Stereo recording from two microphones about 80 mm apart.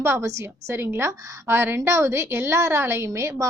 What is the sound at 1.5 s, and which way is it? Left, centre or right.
A woman's voice, right.